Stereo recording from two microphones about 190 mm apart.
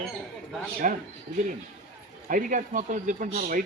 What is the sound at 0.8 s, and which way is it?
Speech, 45° right (ahead or behind).